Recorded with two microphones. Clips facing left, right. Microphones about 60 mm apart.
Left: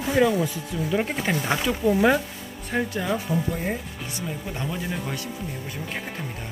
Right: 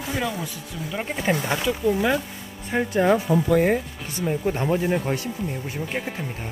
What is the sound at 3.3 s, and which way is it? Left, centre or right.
Speech, right.